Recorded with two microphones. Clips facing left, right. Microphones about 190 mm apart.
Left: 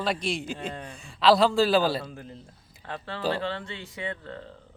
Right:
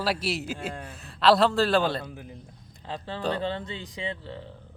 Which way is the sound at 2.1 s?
10° right (ahead or behind).